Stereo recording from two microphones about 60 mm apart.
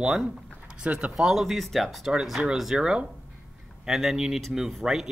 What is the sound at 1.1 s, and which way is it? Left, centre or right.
Speech, centre.